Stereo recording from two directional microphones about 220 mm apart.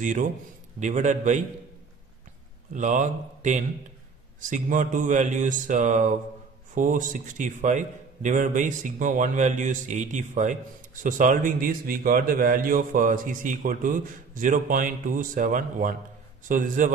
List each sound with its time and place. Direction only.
0.0 s a man's voice: 35° right (ahead or behind)
2.7 s a man's voice: 35° right (ahead or behind)